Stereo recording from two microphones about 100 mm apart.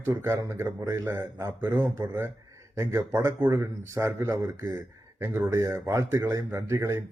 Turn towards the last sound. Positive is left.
turn(degrees=-30)  # may be behind; listen again after turning